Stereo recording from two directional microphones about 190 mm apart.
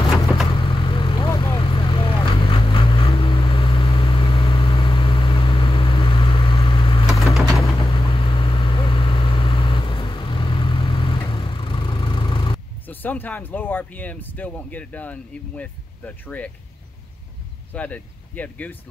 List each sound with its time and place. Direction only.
0.5 s vehicle: 25° left (ahead or behind)
12.8 s speech: 10° left (ahead or behind)
17.7 s speech: 10° left (ahead or behind)